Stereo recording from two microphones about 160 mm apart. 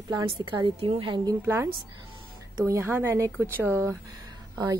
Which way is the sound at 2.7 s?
15° right (ahead or behind).